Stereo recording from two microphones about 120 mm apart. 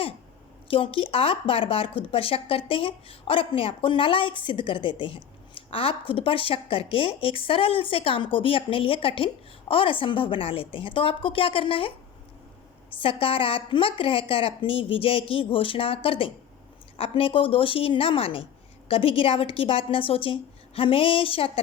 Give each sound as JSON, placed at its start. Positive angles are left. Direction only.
{"t": 0.7, "sound": "speech", "side_deg": 50}
{"t": 13.0, "sound": "speech", "side_deg": 50}